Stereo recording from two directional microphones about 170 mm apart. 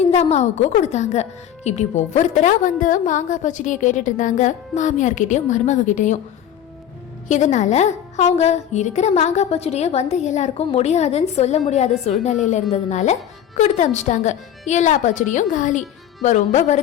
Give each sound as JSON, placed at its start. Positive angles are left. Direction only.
{"t": 0.0, "sound": "a woman's voice", "side_deg": 40}
{"t": 7.3, "sound": "a woman's voice", "side_deg": 45}